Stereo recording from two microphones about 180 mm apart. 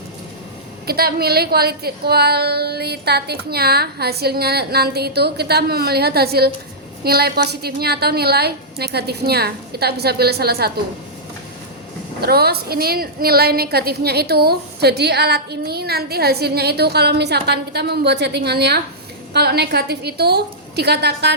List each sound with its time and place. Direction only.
0.9 s a woman's voice: 60° right (ahead or behind)
12.2 s a woman's voice: 60° right (ahead or behind)